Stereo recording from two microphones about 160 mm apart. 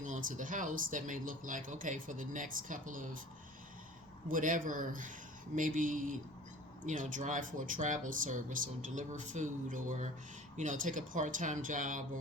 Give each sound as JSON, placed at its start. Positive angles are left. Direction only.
{"t": 0.0, "sound": "speech", "side_deg": -55}
{"t": 4.3, "sound": "speech", "side_deg": -55}